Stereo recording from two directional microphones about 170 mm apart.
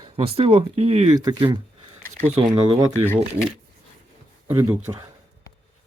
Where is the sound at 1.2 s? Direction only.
25° right (ahead or behind).